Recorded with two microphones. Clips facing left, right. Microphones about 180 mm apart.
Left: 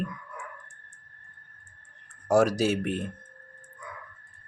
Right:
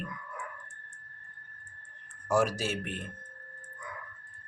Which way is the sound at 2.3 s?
40° left (ahead or behind).